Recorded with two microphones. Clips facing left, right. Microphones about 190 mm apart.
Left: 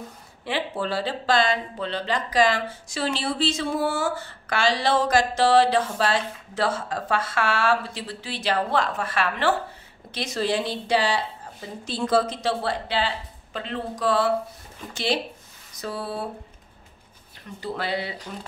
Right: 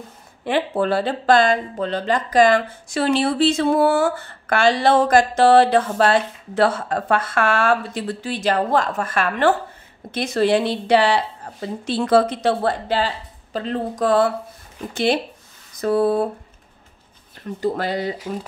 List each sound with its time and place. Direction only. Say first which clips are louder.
0.5 s speech: right 7 dB; 55° right (ahead or behind)
15.8 s speech: right 13 dB; 50° right (ahead or behind)
17.6 s speech: right 6 dB; 45° right (ahead or behind)